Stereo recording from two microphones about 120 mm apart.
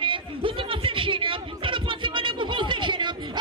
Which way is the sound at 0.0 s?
45° right (ahead or behind).